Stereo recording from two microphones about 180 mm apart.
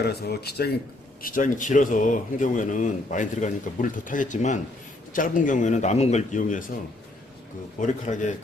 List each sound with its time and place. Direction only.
0.0 s speech: 65° left (ahead or behind)
1.2 s speech: 50° left (ahead or behind)
7.8 s speech: 45° left (ahead or behind)